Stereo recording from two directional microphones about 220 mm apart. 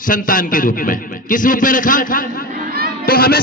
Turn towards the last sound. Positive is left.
turn(degrees=45)  # may be behind; listen again after turning